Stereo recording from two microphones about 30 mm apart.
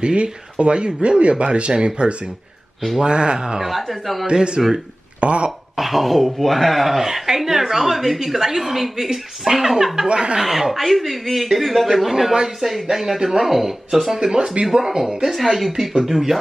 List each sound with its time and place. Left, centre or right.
0.0 s speech: right
3.6 s a man's voice: centre
4.3 s speech: right
4.6 s a woman's voice: centre
5.2 s speech: right
5.8 s a man's voice: centre
10.0 s speech: right
10.4 s a man's voice: centre
14.2 s a woman's voice: centre
15.4 s a man's voice: centre